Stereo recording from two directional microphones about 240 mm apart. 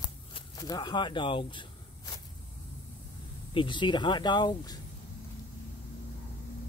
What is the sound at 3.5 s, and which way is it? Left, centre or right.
Speech, centre.